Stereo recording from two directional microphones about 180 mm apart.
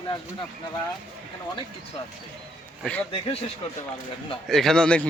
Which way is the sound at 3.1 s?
30° left (ahead or behind).